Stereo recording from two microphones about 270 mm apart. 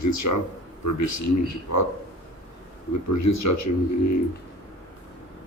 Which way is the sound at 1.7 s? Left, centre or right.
Left.